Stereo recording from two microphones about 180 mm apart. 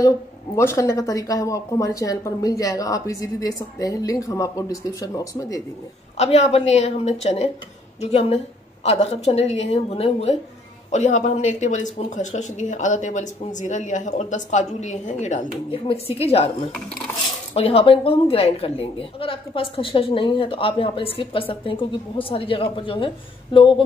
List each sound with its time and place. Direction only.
0.6 s a woman's voice: 15° left (ahead or behind)
6.1 s speech: 40° left (ahead or behind)
17.6 s a woman's voice: 30° left (ahead or behind)